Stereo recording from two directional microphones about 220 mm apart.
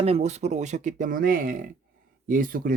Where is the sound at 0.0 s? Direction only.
30° right (ahead or behind).